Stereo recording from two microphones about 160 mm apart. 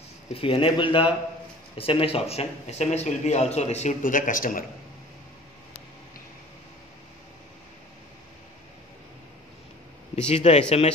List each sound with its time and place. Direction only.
0.3 s a man's voice: 35° left (ahead or behind); by 4.6 s 55° left (ahead or behind)
10.1 s speech: 45° left (ahead or behind)